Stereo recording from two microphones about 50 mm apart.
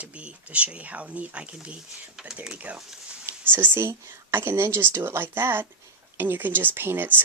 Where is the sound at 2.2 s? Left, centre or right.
Centre.